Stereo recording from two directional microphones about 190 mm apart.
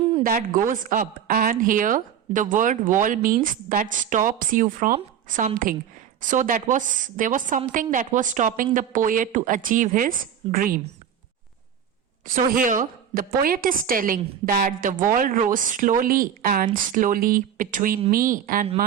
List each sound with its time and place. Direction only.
0.2 s a woman's voice: 50° right (ahead or behind)
6.1 s a woman's voice: 45° right (ahead or behind)
12.2 s a woman's voice: 45° right (ahead or behind)